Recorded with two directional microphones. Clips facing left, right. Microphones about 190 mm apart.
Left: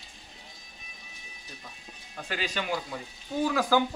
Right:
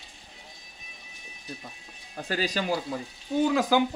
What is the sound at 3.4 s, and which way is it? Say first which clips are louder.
Speech: right 2 dB; 20° right (ahead or behind).